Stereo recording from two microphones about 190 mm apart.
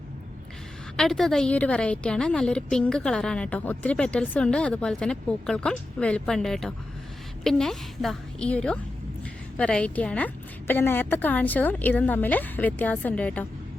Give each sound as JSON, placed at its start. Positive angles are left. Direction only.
{"t": 0.9, "sound": "a woman's voice", "side_deg": 0}